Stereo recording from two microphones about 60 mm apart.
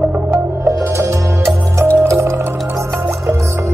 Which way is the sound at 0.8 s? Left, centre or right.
Right.